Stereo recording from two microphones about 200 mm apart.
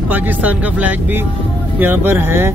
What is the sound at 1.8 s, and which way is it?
Speech, 10° right (ahead or behind).